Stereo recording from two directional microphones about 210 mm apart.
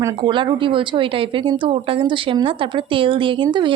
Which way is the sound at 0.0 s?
20° right (ahead or behind).